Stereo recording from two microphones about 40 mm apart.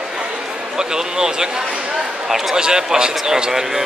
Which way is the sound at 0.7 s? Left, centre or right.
Centre.